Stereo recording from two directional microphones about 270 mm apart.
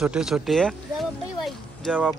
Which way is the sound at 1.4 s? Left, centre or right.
Centre.